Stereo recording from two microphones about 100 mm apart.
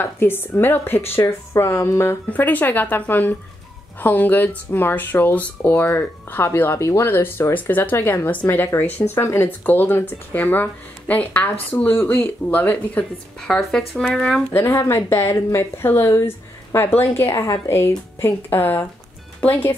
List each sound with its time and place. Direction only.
0.0 s speech: 20° left (ahead or behind)
2.3 s speech: 15° left (ahead or behind)
14.5 s speech: 30° left (ahead or behind)